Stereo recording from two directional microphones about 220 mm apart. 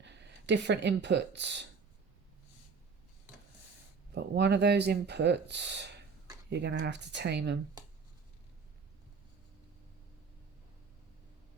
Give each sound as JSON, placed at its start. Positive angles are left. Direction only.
{"t": 0.0, "sound": "speech", "side_deg": -50}
{"t": 4.1, "sound": "speech", "side_deg": -50}